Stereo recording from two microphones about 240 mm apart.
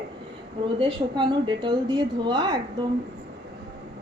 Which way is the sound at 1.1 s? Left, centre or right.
Centre.